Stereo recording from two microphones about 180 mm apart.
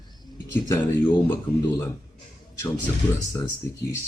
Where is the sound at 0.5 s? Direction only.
10° left (ahead or behind).